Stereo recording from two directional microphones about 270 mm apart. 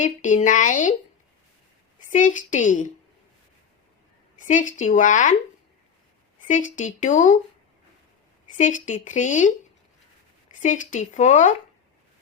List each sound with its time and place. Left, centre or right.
0.0 s a woman's voice: left
2.0 s a woman's voice: left
4.4 s a woman's voice: left
6.5 s a woman's voice: left
8.5 s a woman's voice: left
10.6 s a woman's voice: left